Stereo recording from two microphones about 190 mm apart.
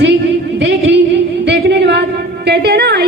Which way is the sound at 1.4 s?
65° right (ahead or behind).